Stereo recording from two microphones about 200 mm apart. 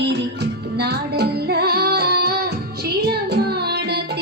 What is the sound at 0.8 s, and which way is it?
Music, 55° right (ahead or behind).